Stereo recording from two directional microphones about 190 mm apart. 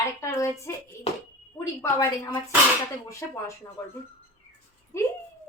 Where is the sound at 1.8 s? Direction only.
15° left (ahead or behind).